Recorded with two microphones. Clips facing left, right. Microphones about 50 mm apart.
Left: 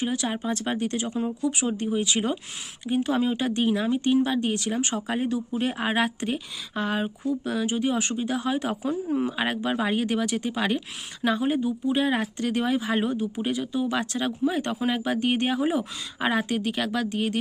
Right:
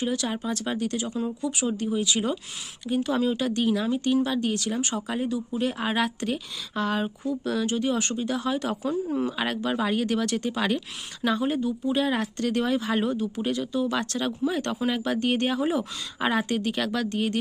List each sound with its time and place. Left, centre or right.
0.0 s speech: left; by 17.4 s centre